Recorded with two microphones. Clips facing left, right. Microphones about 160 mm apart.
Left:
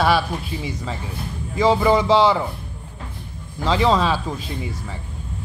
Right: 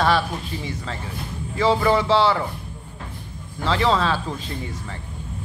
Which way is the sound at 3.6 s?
15° left (ahead or behind).